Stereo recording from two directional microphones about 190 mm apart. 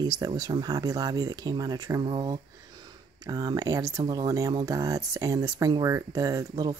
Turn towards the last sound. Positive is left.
turn(degrees=-20)  # may be behind; listen again after turning